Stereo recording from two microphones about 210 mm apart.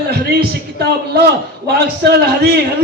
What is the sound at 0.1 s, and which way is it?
A man's voice, 50° right (ahead or behind).